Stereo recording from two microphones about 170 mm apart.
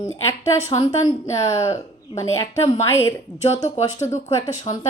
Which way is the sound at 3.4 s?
40° left (ahead or behind).